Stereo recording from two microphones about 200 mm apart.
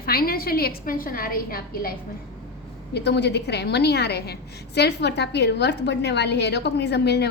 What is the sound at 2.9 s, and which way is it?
A woman's voice, 60° left (ahead or behind).